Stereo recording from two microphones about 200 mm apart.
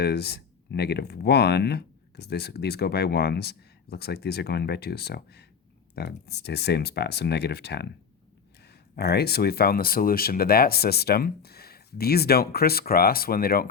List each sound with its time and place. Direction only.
0.0 s speech: 55° left (ahead or behind)